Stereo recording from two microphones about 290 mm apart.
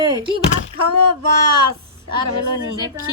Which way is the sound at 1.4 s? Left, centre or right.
Right.